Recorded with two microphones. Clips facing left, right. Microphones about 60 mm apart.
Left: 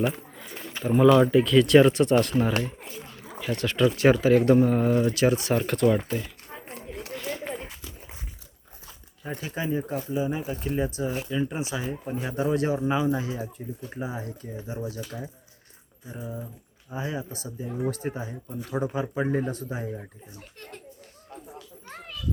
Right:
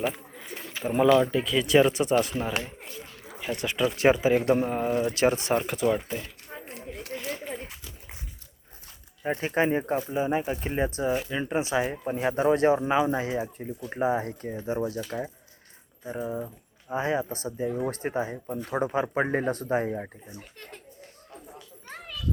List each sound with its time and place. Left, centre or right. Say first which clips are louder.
1.1 s speech: left 4 dB; centre
3.4 s speech: left 3 dB; centre
5.1 s speech: left 1 dB; right
5.6 s speech: left 3 dB; centre
6.2 s a sound: even; centre
9.2 s speech: right 6 dB; right
9.9 s speech: right 2 dB; right
13.4 s speech: right 2 dB; right
21.3 s children playing: left 3 dB; centre